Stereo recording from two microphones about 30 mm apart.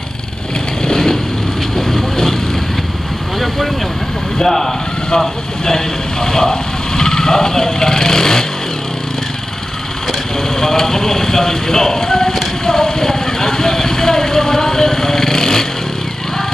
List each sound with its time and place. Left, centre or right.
0.8 s vehicle: left
4.4 s speech: centre
10.5 s vehicle: centre